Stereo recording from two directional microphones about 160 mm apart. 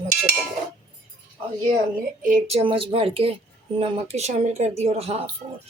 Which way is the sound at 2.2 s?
55° right (ahead or behind).